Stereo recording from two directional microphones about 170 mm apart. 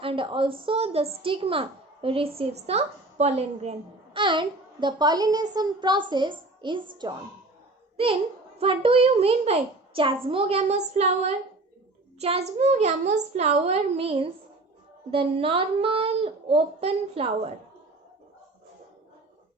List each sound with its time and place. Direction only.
0.0 s a woman's voice: 30° right (ahead or behind)